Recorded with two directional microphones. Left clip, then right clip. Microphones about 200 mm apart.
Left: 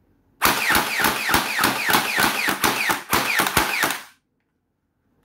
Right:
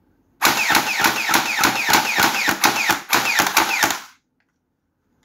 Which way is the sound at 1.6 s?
20° right (ahead or behind).